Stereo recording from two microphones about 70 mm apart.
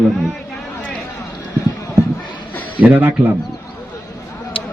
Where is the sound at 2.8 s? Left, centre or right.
Right.